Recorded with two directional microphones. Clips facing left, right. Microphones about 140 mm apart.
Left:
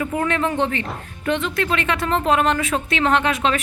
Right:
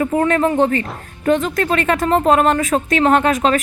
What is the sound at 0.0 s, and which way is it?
Speech, 40° right (ahead or behind).